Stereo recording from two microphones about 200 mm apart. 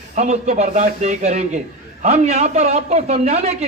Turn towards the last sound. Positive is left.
turn(degrees=-35)  # may be behind; listen again after turning